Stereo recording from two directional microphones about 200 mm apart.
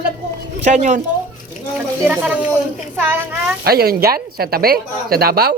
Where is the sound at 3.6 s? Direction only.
50° right (ahead or behind).